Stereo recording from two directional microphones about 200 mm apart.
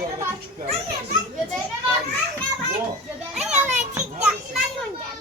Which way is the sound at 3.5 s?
35° right (ahead or behind).